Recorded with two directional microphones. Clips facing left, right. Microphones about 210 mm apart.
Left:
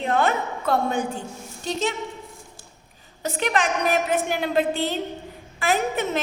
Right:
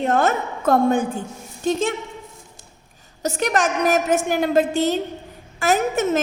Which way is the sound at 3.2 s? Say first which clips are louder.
Right 3 dB; 45° right (ahead or behind).